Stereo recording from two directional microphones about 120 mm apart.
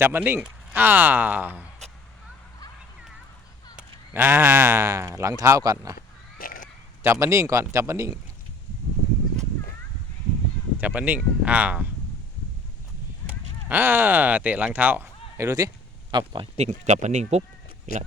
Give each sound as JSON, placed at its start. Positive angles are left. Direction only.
{"t": 0.0, "sound": "speech", "side_deg": -15}
{"t": 3.8, "sound": "speech", "side_deg": -15}
{"t": 7.0, "sound": "speech", "side_deg": -20}
{"t": 10.8, "sound": "speech", "side_deg": -15}
{"t": 13.7, "sound": "speech", "side_deg": -15}
{"t": 16.1, "sound": "speech", "side_deg": -40}
{"t": 16.6, "sound": "speech", "side_deg": -70}